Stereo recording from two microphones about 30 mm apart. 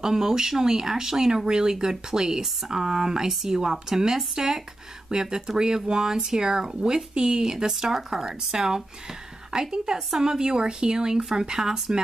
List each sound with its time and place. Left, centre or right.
0.0 s speech: centre